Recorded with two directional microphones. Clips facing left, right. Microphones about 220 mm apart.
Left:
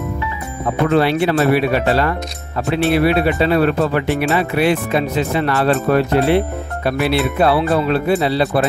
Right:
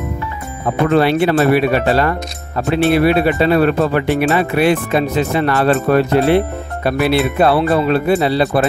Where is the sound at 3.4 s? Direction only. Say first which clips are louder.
Right 2 dB; 45° right (ahead or behind).